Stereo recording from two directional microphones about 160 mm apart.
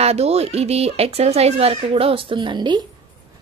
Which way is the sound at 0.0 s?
40° right (ahead or behind).